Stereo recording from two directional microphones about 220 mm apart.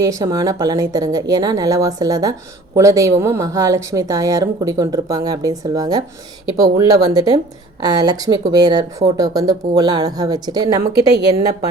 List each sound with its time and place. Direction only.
0.0 s speech: 15° right (ahead or behind)